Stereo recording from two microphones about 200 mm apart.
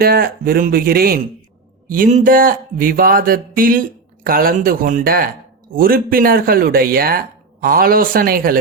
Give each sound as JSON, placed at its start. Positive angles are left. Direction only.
{"t": 0.0, "sound": "speech", "side_deg": -50}